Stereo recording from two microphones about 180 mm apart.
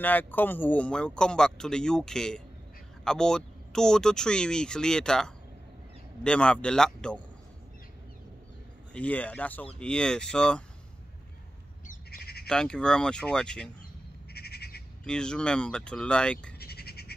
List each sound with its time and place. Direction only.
0.0 s speech: 10° left (ahead or behind)
8.9 s speech: 5° left (ahead or behind)
11.9 s squawk: 60° left (ahead or behind)
12.4 s speech: 5° left (ahead or behind)
14.3 s bird: 65° left (ahead or behind)
15.0 s speech: 5° left (ahead or behind)
16.5 s goat: 60° left (ahead or behind)